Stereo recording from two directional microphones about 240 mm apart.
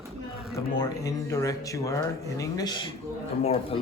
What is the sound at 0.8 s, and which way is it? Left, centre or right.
Speech, centre.